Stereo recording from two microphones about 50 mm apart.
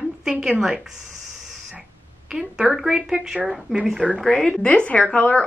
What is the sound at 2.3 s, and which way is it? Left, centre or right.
Speech, centre.